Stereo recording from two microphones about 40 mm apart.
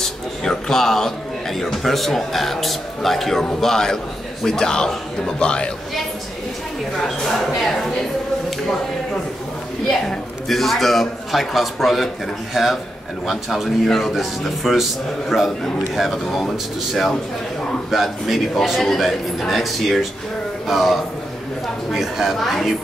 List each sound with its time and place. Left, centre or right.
0.0 s a man's voice: centre
7.0 s speech: centre
7.5 s a sound: centre
10.0 s a man's voice: centre
13.3 s a man's voice: centre
17.9 s a man's voice: centre